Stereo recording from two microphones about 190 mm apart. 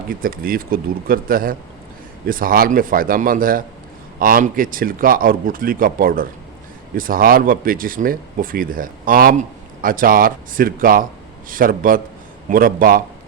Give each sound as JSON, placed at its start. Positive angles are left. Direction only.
{"t": 0.1, "sound": "speech", "side_deg": -50}